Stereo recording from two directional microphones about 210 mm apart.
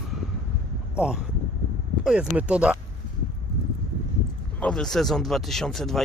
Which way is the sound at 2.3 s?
5° right (ahead or behind).